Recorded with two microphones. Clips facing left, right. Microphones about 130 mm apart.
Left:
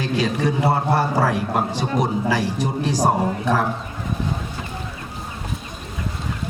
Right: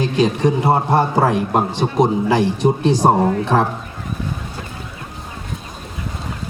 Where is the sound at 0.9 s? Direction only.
20° right (ahead or behind).